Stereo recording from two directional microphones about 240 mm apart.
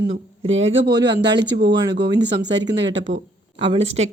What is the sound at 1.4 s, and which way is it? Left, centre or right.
Speech, right.